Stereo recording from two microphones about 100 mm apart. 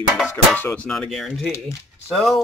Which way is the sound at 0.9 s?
5° left (ahead or behind).